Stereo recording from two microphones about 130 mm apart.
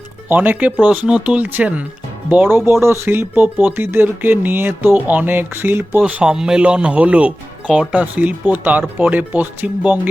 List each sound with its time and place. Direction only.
0.3 s speech: 10° right (ahead or behind)